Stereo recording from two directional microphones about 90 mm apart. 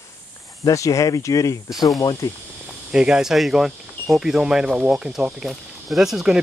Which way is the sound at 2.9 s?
10° right (ahead or behind).